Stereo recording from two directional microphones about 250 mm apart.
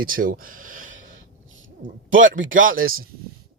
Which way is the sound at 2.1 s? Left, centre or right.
Right.